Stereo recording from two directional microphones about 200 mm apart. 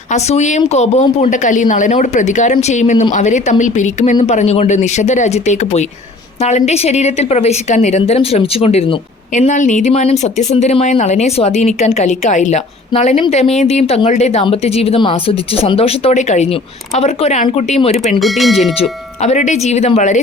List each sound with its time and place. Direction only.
0.1 s a woman's voice: 35° left (ahead or behind)
18.2 s speech: centre (ahead or behind)
18.8 s a woman's voice: 35° left (ahead or behind)